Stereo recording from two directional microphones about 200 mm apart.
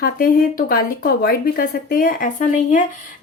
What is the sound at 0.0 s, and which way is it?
A woman's voice, 45° left (ahead or behind).